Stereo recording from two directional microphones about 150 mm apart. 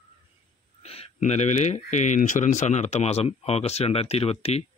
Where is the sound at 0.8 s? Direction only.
45° left (ahead or behind).